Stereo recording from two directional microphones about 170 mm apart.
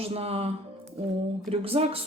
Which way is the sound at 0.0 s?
35° right (ahead or behind).